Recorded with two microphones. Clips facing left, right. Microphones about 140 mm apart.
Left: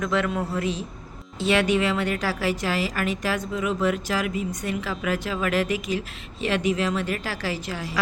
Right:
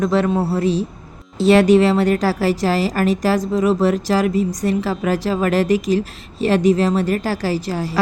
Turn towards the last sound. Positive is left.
turn(degrees=-40)  # may be behind; listen again after turning